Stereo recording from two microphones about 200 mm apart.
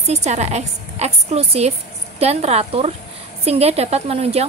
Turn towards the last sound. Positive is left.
turn(degrees=-30)  # may be behind; listen again after turning